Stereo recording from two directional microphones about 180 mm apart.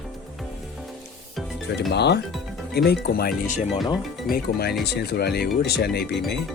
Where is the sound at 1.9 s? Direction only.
70° left (ahead or behind).